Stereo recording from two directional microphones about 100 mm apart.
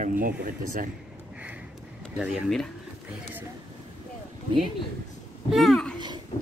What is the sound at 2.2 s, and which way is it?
Speech, centre (ahead or behind).